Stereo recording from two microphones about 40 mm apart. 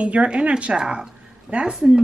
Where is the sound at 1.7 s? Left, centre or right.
Centre.